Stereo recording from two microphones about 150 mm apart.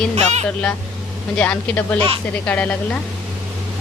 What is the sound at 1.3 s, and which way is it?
Speech, 10° left (ahead or behind).